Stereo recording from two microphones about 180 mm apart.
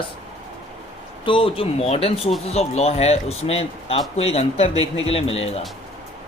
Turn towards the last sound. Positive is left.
turn(degrees=35)  # may be behind; listen again after turning